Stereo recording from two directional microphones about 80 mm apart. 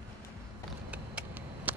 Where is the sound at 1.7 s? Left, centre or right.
Right.